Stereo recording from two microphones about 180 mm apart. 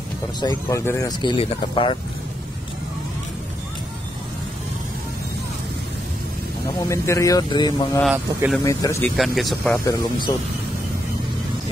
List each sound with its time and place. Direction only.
0.4 s speech: 20° left (ahead or behind)
6.9 s speech: 15° left (ahead or behind)
8.0 s speech: 5° right (ahead or behind)
8.6 s speech: 15° left (ahead or behind)
9.1 s speech: centre (ahead or behind)
9.8 s speech: 25° left (ahead or behind)